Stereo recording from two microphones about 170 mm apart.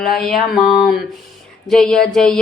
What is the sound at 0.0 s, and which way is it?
Speech, centre (ahead or behind).